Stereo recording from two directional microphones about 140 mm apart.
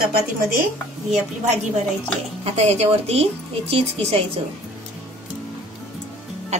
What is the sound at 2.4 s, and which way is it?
A woman's voice, 50° right (ahead or behind).